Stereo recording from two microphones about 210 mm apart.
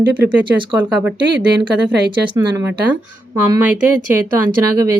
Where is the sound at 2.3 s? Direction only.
15° right (ahead or behind).